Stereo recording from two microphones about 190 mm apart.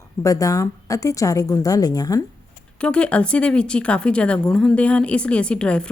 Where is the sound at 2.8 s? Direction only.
5° left (ahead or behind).